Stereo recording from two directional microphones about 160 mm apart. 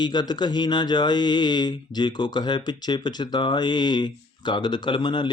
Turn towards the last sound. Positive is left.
turn(degrees=30)  # may be behind; listen again after turning